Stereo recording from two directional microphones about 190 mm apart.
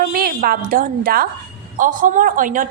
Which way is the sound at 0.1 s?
50° right (ahead or behind).